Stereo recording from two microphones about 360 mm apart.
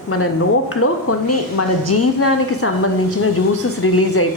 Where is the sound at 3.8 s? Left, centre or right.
Left.